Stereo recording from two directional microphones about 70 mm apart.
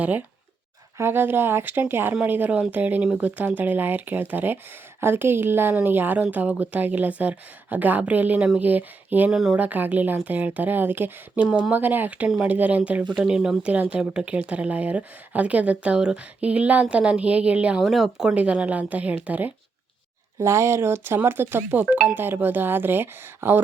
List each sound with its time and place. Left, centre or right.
0.9 s speech: right
9.3 s speech: centre
9.6 s speech: right
11.4 s speech: centre
11.7 s speech: right
17.8 s speech: centre
18.3 s speech: centre
20.4 s speech: right